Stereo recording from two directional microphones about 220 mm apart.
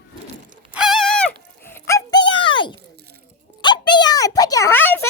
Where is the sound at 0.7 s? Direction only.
Centre (ahead or behind); by 2.8 s 20° left (ahead or behind).